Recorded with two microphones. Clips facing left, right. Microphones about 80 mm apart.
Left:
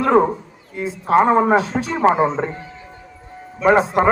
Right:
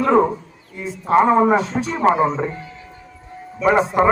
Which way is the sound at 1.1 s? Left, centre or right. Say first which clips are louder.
Even; left.